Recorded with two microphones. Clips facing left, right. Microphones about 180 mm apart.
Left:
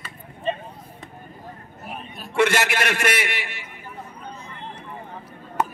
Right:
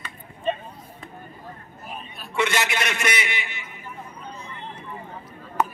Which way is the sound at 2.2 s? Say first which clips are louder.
Left 4 dB; 60° left (ahead or behind).